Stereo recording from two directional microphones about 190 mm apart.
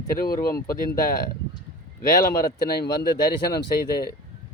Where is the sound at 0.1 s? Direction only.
50° left (ahead or behind).